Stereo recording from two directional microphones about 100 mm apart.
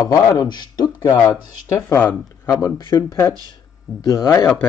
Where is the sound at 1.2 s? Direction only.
30° left (ahead or behind).